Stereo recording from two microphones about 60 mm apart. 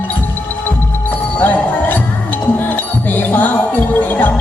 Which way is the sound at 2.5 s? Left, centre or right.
Left.